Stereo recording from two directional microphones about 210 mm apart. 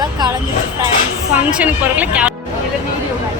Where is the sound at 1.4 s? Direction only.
5° right (ahead or behind).